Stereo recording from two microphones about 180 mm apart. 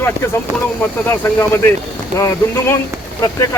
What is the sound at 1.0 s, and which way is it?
Speech, 10° left (ahead or behind).